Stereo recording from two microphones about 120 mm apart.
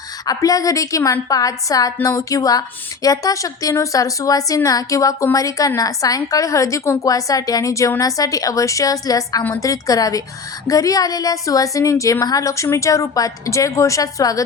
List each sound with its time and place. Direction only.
0.3 s a woman's voice: 30° left (ahead or behind)